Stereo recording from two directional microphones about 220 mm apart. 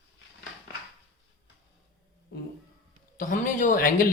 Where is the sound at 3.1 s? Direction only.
35° left (ahead or behind).